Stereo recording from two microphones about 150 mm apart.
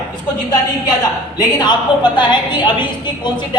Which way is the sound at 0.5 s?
25° left (ahead or behind).